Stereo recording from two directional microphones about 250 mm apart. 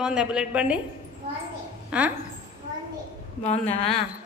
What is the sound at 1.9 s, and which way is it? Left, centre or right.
Speech, centre.